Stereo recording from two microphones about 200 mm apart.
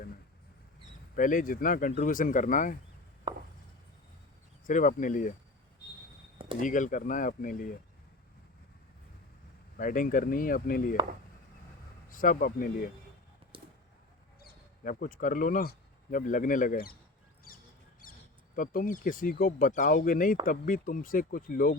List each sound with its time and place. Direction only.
1.1 s speech: 40° left (ahead or behind)
3.3 s chopping: 25° right (ahead or behind)
4.6 s speech: 40° left (ahead or behind)
6.6 s speech: 40° left (ahead or behind)
9.7 s speech: 40° left (ahead or behind)
12.1 s speech: 40° left (ahead or behind)
13.5 s a sound: 25° right (ahead or behind)
14.4 s speech: 45° left (ahead or behind)
17.5 s mouse: 45° left (ahead or behind)
18.0 s cricket: 45° left (ahead or behind)
18.5 s speech: 45° left (ahead or behind)